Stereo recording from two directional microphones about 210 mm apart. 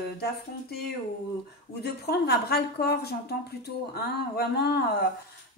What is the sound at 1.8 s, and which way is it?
A woman's voice, 50° left (ahead or behind).